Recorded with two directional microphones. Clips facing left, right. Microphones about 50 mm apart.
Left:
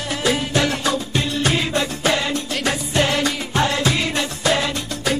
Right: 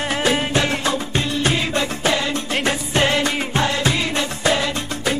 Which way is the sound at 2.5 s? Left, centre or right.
Right.